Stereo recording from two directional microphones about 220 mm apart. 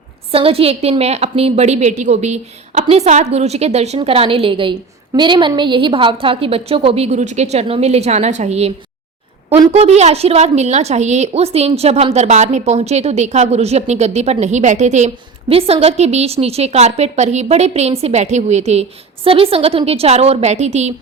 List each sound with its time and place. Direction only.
0.3 s a woman's voice: 25° right (ahead or behind)
9.7 s a woman's voice: 30° right (ahead or behind)